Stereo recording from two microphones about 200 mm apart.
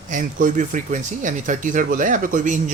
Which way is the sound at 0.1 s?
40° right (ahead or behind).